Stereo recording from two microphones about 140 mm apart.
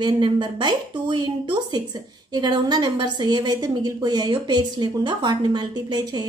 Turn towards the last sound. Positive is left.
turn(degrees=-30)  # may be behind; listen again after turning